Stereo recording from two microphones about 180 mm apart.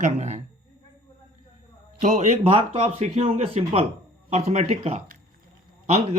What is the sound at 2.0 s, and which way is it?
Speech, 40° right (ahead or behind).